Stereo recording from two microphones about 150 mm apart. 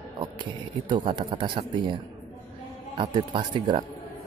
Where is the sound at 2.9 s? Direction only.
35° right (ahead or behind).